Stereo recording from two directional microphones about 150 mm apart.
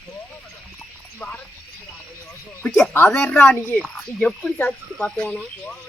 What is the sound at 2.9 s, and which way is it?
Speech, 10° left (ahead or behind).